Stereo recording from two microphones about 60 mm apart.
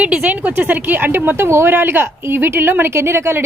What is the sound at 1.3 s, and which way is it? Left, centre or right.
A woman's voice, right.